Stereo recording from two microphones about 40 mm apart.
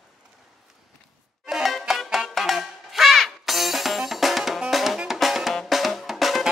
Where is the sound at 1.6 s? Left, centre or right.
Centre.